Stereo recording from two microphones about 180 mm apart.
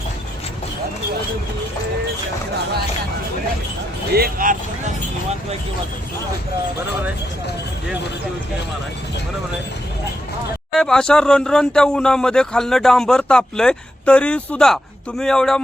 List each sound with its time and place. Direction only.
4.1 s a man's voice: 55° right (ahead or behind)
10.8 s speech: 5° left (ahead or behind)